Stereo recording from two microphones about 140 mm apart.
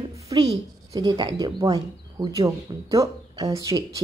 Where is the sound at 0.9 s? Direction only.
30° right (ahead or behind).